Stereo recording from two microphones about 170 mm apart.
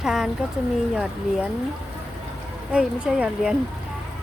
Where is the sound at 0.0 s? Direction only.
5° right (ahead or behind).